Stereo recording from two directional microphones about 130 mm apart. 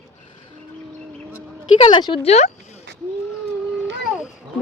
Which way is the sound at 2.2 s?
60° left (ahead or behind).